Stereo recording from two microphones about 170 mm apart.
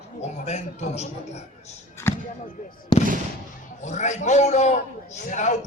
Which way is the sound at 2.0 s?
15° left (ahead or behind).